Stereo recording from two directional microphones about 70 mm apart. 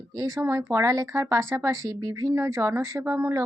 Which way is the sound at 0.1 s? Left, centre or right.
Right.